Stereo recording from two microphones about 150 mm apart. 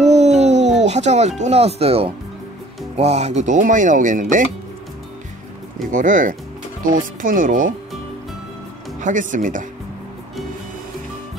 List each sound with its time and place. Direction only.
0.0 s music: 50° right (ahead or behind)
1.4 s speech: 45° right (ahead or behind); by 4.5 s 60° right (ahead or behind)
5.9 s speech: 60° right (ahead or behind)
9.0 s speech: 60° right (ahead or behind)